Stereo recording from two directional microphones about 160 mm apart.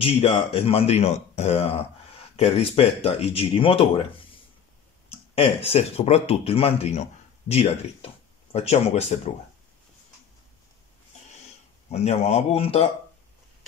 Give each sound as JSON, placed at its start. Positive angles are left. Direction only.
{"t": 0.0, "sound": "speech", "side_deg": 40}
{"t": 11.9, "sound": "speech", "side_deg": 40}